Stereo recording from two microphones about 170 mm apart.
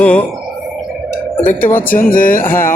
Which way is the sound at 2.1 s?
55° left (ahead or behind).